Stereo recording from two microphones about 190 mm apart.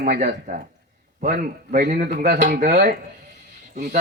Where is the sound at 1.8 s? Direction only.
45° right (ahead or behind).